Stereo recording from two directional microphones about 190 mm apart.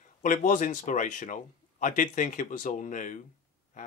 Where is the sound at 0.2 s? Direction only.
45° left (ahead or behind).